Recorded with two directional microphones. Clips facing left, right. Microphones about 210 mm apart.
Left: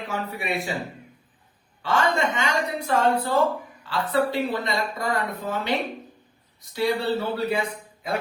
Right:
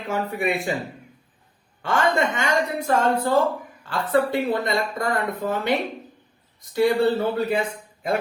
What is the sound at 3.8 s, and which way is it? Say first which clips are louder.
Speech: right 2 dB; 50° right (ahead or behind).